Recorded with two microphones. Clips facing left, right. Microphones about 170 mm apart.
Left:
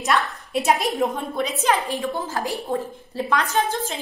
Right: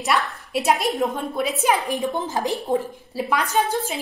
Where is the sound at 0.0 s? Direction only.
5° right (ahead or behind).